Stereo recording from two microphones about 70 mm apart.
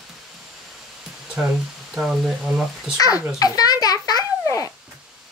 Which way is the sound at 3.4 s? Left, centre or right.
Left.